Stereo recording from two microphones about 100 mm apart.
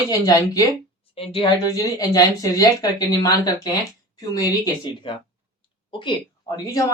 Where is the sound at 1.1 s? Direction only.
75° left (ahead or behind).